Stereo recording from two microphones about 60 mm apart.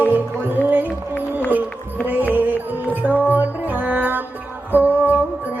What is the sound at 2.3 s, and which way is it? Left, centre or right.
Music, right.